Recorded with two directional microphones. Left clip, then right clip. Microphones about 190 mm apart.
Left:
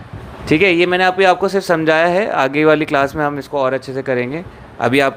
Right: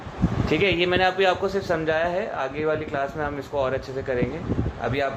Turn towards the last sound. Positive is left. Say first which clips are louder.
# left 11 dB
turn(degrees=55)  # may be behind; listen again after turning